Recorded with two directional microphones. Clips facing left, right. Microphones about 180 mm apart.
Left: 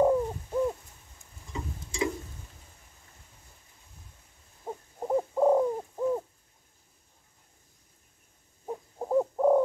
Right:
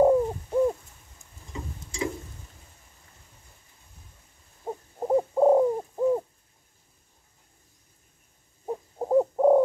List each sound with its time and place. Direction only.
0.0 s bird: 20° right (ahead or behind)
4.6 s bird: 20° right (ahead or behind)
8.6 s owl: 20° right (ahead or behind)